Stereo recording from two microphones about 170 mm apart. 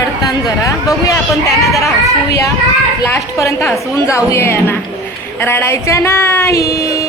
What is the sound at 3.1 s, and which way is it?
A woman's voice, 15° left (ahead or behind).